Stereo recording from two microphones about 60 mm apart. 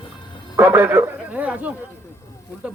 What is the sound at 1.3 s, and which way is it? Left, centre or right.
Speech, right.